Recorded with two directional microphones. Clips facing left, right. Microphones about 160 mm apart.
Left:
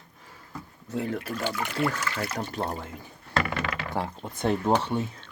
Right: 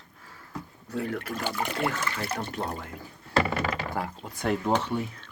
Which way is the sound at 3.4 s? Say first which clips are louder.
Right 2 dB; 30° right (ahead or behind).